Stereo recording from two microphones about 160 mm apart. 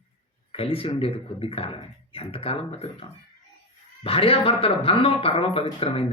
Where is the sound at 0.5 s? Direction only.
35° left (ahead or behind).